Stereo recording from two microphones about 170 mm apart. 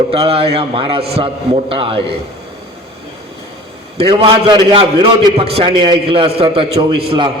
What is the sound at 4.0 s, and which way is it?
A man's voice, 30° right (ahead or behind).